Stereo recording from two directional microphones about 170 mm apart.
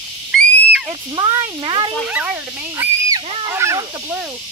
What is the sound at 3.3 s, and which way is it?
Speech, 30° right (ahead or behind).